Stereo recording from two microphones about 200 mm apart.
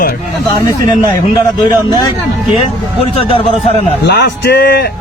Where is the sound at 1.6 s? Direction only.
20° left (ahead or behind).